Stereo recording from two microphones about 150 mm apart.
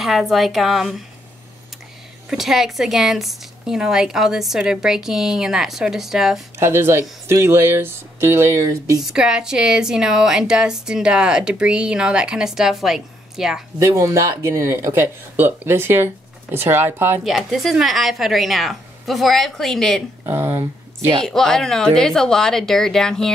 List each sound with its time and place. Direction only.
0.0 s a woman's voice: centre (ahead or behind)
2.2 s a woman's voice: centre (ahead or behind)
6.6 s speech: 15° right (ahead or behind)
9.0 s a woman's voice: 5° right (ahead or behind)
13.7 s speech: 20° right (ahead or behind)
17.2 s a woman's voice: centre (ahead or behind)
20.2 s speech: 15° right (ahead or behind)
21.2 s a woman's voice: centre (ahead or behind)